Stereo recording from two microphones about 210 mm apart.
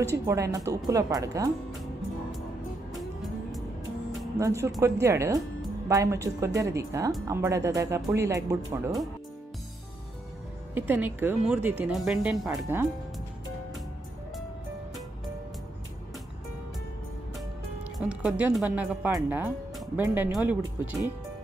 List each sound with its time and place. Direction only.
0.0 s speech: 15° right (ahead or behind)
3.0 s music: centre (ahead or behind)
4.4 s speech: 15° right (ahead or behind)
10.7 s speech: 10° right (ahead or behind)
17.9 s speech: 5° right (ahead or behind)